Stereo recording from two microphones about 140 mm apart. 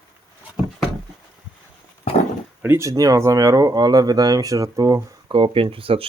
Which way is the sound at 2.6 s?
20° right (ahead or behind).